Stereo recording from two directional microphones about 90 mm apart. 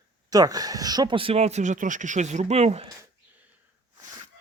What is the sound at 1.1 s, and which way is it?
Speech, 90° right.